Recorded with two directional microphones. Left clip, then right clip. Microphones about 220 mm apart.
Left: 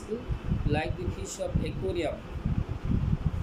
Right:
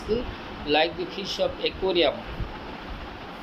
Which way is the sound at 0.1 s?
25° left (ahead or behind).